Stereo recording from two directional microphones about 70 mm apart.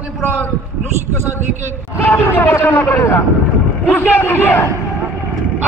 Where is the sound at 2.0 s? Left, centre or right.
Left.